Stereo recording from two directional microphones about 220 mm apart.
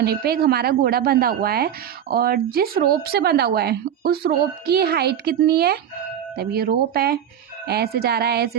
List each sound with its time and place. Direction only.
0.0 s a woman's voice: 45° right (ahead or behind)